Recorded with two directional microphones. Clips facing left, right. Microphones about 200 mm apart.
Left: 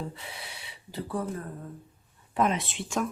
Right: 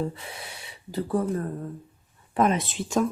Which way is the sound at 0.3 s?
45° right (ahead or behind).